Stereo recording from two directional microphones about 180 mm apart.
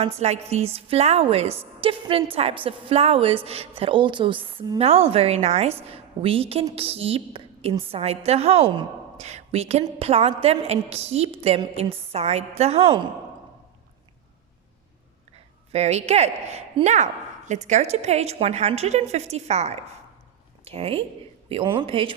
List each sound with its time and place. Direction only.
0.0 s a woman's voice: 35° right (ahead or behind)
15.7 s a woman's voice: 35° right (ahead or behind)